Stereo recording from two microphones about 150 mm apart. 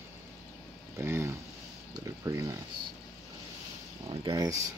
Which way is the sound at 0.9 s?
15° right (ahead or behind).